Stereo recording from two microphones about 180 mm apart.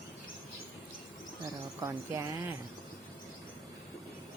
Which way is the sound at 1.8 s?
25° right (ahead or behind).